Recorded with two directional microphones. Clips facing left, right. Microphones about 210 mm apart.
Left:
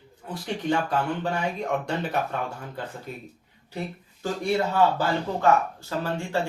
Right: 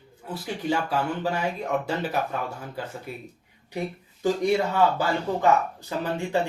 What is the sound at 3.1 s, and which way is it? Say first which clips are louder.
Speech: right 1 dB; 10° right (ahead or behind).